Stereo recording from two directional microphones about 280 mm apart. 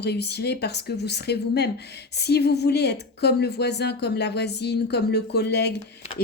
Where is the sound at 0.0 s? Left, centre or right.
Left.